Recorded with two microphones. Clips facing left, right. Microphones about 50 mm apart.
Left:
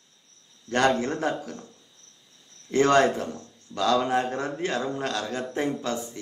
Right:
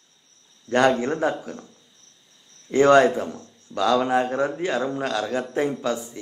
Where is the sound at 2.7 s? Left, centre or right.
Centre.